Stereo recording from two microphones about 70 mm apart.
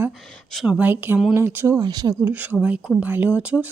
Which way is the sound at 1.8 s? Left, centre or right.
Right.